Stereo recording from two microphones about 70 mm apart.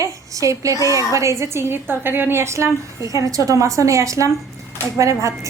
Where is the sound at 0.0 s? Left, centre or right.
Right.